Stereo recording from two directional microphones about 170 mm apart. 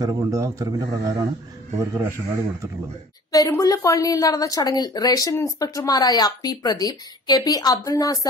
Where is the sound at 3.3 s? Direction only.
20° left (ahead or behind).